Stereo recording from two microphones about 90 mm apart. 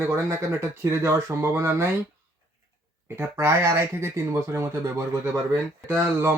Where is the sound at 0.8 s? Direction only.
30° right (ahead or behind).